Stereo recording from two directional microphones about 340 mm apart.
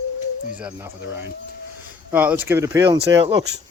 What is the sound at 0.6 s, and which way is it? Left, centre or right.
Speech, centre.